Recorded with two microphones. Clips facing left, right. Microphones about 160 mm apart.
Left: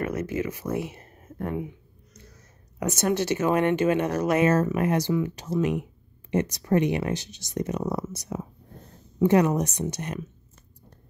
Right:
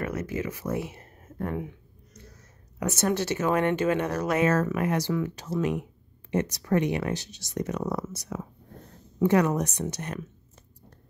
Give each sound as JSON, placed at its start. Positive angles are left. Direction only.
{"t": 0.2, "sound": "speech", "side_deg": 20}
{"t": 2.9, "sound": "speech", "side_deg": 15}